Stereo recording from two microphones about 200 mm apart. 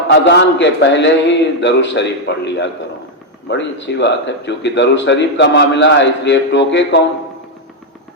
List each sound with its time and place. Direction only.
0.1 s a man's voice: 60° left (ahead or behind)